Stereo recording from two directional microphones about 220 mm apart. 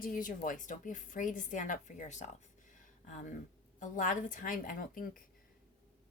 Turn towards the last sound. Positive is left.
turn(degrees=40)  # may be behind; listen again after turning